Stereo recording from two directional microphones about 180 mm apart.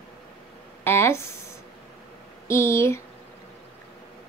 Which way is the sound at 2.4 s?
15° left (ahead or behind).